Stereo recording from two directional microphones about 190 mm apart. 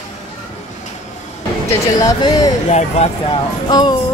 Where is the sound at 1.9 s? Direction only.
20° left (ahead or behind).